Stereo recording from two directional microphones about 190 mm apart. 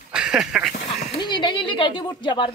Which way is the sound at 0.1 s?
5° right (ahead or behind).